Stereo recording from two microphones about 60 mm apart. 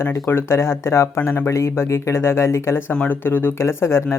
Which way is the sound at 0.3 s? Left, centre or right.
Left.